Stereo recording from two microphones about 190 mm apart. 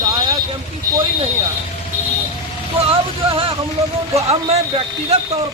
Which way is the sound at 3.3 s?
30° right (ahead or behind).